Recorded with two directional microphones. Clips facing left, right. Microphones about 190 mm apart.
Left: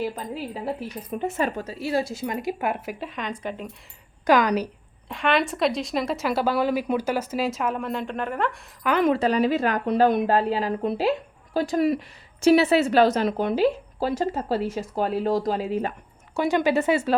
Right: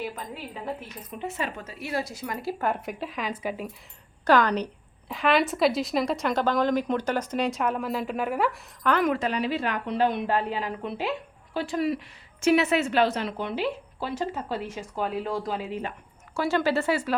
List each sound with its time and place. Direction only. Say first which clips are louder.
0.0 s speech: left 5 dB; 35° left (ahead or behind)
1.2 s speech: left 6 dB; 45° left (ahead or behind); by 3.7 s 5° right (ahead or behind)
4.3 s speech: left 2 dB; 10° left (ahead or behind)
5.0 s a woman's voice: even; centre (ahead or behind)
9.0 s speech: left 8 dB; 30° left (ahead or behind)
16.3 s speech: left 3 dB; 20° left (ahead or behind)